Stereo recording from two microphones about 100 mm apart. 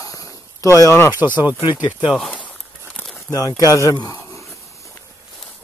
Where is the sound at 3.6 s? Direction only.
35° left (ahead or behind).